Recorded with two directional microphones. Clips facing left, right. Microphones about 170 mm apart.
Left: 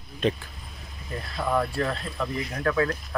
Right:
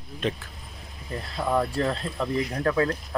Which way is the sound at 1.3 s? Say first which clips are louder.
Right 1 dB; 20° right (ahead or behind).